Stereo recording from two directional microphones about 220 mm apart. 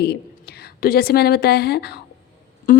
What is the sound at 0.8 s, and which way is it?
A woman's voice, 45° left (ahead or behind).